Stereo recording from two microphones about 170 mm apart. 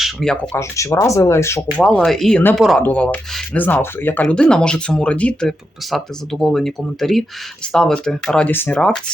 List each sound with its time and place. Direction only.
0.0 s speech: centre (ahead or behind)
0.5 s speech: 15° left (ahead or behind)
1.7 s speech: 5° left (ahead or behind)
2.6 s speech: centre (ahead or behind)
2.8 s speech: 10° left (ahead or behind)